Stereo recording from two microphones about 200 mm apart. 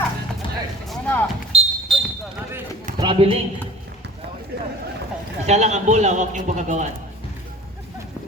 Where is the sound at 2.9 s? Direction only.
25° right (ahead or behind).